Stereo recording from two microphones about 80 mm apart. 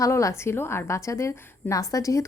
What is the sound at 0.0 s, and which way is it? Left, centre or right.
Speech, left.